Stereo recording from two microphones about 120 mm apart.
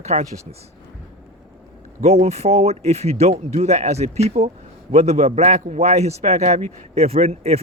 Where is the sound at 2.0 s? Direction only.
65° right (ahead or behind).